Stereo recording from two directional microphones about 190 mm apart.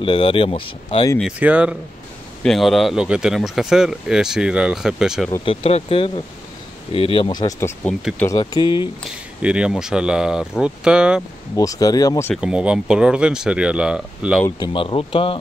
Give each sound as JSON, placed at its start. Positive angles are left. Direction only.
{"t": 0.0, "sound": "speech", "side_deg": 25}
{"t": 1.2, "sound": "speech", "side_deg": -5}
{"t": 5.4, "sound": "speech", "side_deg": 30}
{"t": 7.8, "sound": "speech", "side_deg": 10}
{"t": 9.1, "sound": "speech", "side_deg": -5}
{"t": 11.5, "sound": "speech", "side_deg": 20}
{"t": 12.4, "sound": "speech", "side_deg": -5}
{"t": 14.6, "sound": "speech", "side_deg": 25}